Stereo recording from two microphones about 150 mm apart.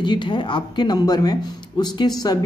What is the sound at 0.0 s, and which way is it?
A woman's voice, 30° left (ahead or behind).